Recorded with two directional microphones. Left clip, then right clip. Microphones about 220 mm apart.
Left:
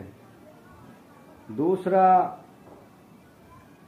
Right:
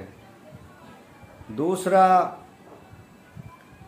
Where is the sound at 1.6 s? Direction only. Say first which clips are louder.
Right 2 dB; 20° right (ahead or behind).